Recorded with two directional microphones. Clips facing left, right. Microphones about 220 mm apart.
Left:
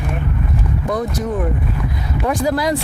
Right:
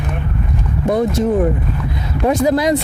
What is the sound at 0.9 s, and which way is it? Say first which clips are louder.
Speech: right 7 dB; 25° right (ahead or behind).